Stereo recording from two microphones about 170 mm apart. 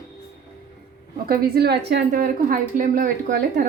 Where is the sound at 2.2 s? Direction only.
55° right (ahead or behind).